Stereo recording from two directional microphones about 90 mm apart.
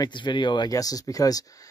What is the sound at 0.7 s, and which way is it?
Speech, 40° left (ahead or behind).